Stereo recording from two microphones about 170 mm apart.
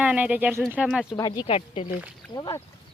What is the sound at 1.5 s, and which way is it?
Speech, 35° left (ahead or behind).